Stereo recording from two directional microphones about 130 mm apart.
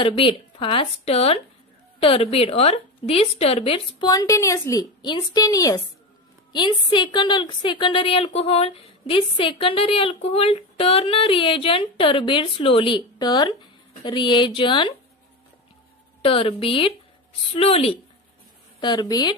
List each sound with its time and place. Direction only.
0.0 s a woman's voice: 40° left (ahead or behind)
4.0 s a woman's voice: 25° left (ahead or behind)
16.2 s a woman's voice: 45° left (ahead or behind)
18.8 s a woman's voice: 35° left (ahead or behind)